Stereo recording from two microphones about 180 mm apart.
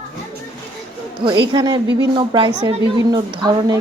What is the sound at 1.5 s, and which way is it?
A woman's voice, 25° right (ahead or behind).